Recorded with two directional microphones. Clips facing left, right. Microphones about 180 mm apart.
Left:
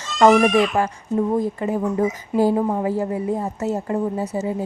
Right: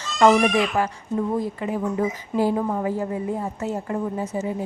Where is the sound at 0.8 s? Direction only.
45° left (ahead or behind).